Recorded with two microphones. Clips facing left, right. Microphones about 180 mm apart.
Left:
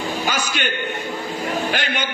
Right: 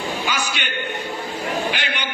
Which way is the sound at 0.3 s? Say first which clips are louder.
Left 2 dB; 45° left (ahead or behind).